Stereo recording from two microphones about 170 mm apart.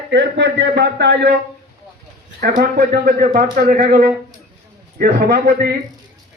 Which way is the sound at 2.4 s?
65° right (ahead or behind).